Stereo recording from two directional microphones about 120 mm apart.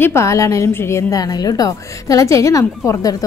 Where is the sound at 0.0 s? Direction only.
20° left (ahead or behind).